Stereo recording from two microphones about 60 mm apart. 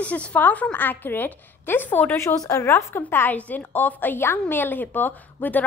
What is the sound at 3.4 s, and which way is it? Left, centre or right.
Speech, left.